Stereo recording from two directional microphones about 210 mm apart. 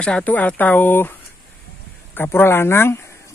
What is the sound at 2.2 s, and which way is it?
Speech, 10° left (ahead or behind).